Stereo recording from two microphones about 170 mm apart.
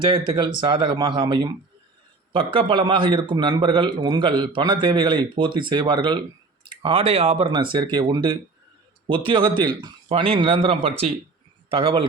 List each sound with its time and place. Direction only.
0.0 s a man's voice: 25° right (ahead or behind)